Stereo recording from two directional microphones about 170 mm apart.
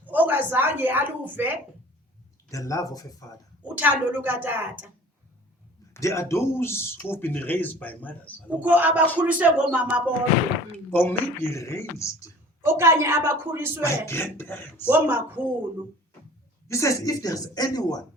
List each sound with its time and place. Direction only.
0.0 s a woman's voice: 10° right (ahead or behind)
2.5 s a woman's voice: 20° left (ahead or behind)
3.6 s a woman's voice: 10° right (ahead or behind)
5.9 s speech: 15° left (ahead or behind)
8.4 s a woman's voice: 10° right (ahead or behind)
10.9 s speech: 10° left (ahead or behind)
12.6 s a woman's voice: 15° right (ahead or behind)
14.1 s speech: 15° left (ahead or behind)
14.8 s a woman's voice: 10° right (ahead or behind)
16.6 s a woman's voice: 15° left (ahead or behind)